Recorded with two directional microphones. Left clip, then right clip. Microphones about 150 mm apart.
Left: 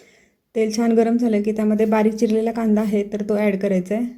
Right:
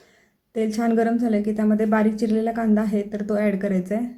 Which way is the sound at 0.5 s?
15° left (ahead or behind).